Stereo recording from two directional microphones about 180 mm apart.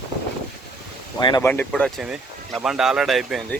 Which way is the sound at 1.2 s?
25° left (ahead or behind).